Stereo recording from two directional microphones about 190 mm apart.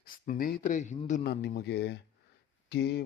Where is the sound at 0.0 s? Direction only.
50° left (ahead or behind).